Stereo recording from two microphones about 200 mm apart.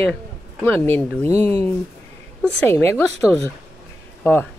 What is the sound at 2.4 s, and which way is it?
A woman's voice, 5° left (ahead or behind).